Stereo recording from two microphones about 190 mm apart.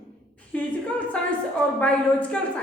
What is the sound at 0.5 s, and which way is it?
Speech, 5° left (ahead or behind).